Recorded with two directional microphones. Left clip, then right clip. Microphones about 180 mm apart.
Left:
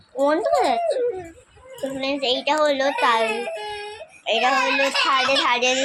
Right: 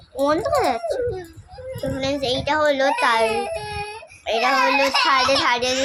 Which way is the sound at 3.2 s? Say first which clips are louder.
Right 2 dB; 60° right (ahead or behind).